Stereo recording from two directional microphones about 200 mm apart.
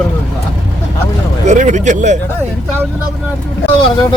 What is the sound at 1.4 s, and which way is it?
Speech, 35° right (ahead or behind).